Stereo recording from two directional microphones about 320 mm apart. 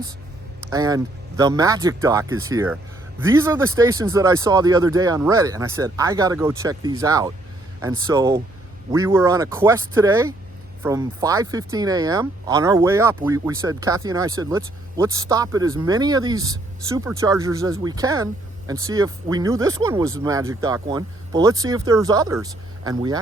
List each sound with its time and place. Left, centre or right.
0.7 s speech: centre